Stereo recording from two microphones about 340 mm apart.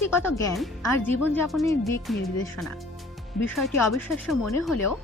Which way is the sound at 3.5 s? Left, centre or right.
Centre.